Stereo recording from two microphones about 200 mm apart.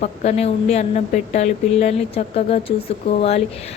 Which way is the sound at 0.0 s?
35° left (ahead or behind).